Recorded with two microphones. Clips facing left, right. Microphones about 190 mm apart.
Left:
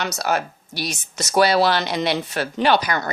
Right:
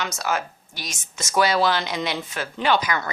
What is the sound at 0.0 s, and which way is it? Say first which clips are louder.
A woman's voice: left 3 dB; 65° left (ahead or behind).